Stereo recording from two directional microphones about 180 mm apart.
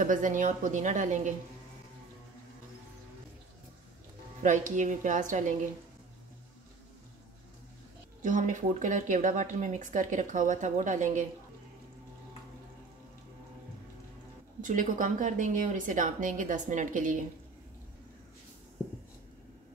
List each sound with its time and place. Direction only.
0.0 s speech: 45° right (ahead or behind)
4.4 s speech: 45° right (ahead or behind)
8.2 s speech: 45° right (ahead or behind)
14.6 s speech: 45° right (ahead or behind)
18.8 s writing: 10° left (ahead or behind)